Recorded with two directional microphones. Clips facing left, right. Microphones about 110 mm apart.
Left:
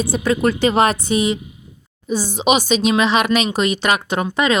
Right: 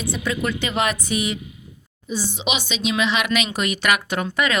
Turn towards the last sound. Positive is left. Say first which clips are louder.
# left 4 dB
turn(degrees=25)  # may be behind; listen again after turning